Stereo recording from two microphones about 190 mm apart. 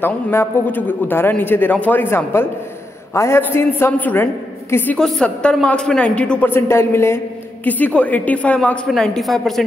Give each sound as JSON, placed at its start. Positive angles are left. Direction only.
{"t": 0.0, "sound": "a woman's voice", "side_deg": 10}